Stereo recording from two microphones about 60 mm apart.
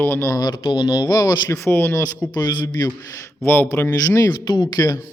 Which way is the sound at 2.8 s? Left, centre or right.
Left.